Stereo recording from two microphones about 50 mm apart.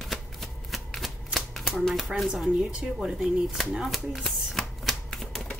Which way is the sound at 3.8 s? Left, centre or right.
Centre.